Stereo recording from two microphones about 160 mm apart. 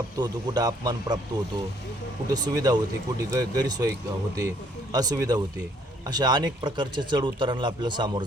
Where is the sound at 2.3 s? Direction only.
25° right (ahead or behind).